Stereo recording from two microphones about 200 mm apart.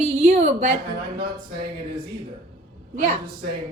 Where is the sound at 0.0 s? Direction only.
35° right (ahead or behind).